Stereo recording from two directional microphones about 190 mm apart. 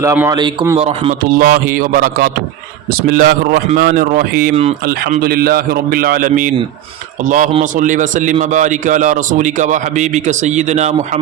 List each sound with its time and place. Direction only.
0.0 s a man's voice: 15° right (ahead or behind)
0.8 s a man's voice: 30° right (ahead or behind)
1.2 s a man's voice: 45° right (ahead or behind)